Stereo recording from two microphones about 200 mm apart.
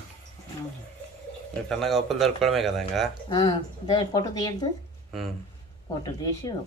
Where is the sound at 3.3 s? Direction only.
20° left (ahead or behind).